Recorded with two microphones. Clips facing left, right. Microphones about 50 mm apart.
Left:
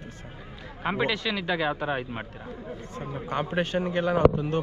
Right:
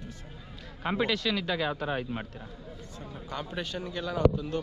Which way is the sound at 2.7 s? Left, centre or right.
Left.